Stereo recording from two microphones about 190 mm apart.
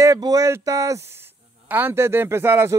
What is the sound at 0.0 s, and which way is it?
Speech, 20° right (ahead or behind).